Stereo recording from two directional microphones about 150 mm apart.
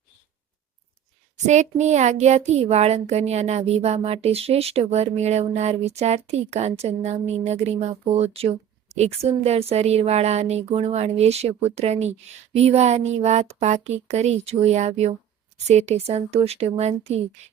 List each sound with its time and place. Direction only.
1.5 s speech: 50° right (ahead or behind)